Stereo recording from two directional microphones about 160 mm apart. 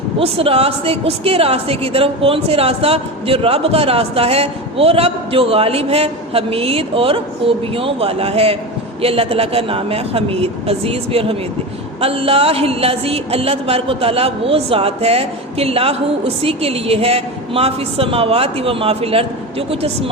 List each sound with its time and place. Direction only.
0.2 s speech: 35° right (ahead or behind)